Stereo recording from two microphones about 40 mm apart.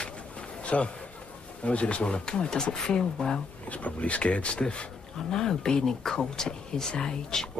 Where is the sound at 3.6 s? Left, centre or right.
Left.